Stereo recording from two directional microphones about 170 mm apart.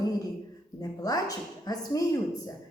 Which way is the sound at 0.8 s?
20° left (ahead or behind).